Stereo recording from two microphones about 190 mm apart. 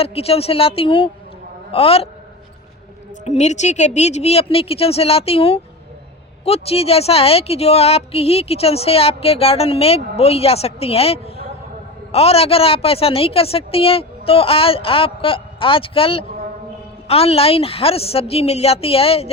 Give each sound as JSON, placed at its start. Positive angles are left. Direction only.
{"t": 0.0, "sound": "a woman's voice", "side_deg": 30}
{"t": 3.2, "sound": "speech", "side_deg": 35}